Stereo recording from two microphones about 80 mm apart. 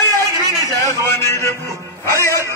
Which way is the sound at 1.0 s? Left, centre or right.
Left.